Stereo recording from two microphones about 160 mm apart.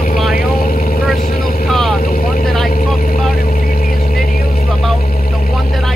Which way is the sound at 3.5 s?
65° left (ahead or behind).